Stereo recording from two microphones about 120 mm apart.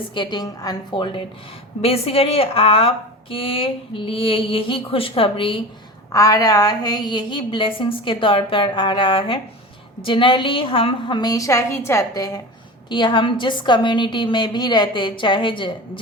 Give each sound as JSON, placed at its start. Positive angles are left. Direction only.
{"t": 0.1, "sound": "a woman's voice", "side_deg": 40}
{"t": 1.8, "sound": "speech", "side_deg": 55}
{"t": 6.1, "sound": "a woman's voice", "side_deg": 30}
{"t": 12.9, "sound": "a woman's voice", "side_deg": 40}